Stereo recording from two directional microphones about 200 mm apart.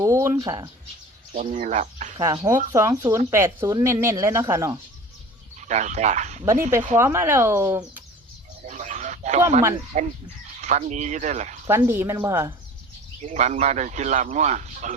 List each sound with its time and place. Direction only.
0.0 s speech: 15° right (ahead or behind)
1.5 s speech: 35° right (ahead or behind)
2.1 s a woman's voice: 15° right (ahead or behind)
5.5 s speech: 35° right (ahead or behind)
6.9 s a woman's voice: 15° right (ahead or behind)
8.6 s a sound: 35° right (ahead or behind)
9.9 s speech: 40° right (ahead or behind)
11.7 s a woman's voice: 10° right (ahead or behind)
13.2 s speech: 35° right (ahead or behind)